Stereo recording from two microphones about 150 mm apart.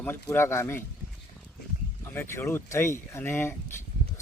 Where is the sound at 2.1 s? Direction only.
15° left (ahead or behind).